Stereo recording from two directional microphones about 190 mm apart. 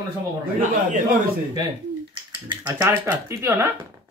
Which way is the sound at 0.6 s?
40° right (ahead or behind).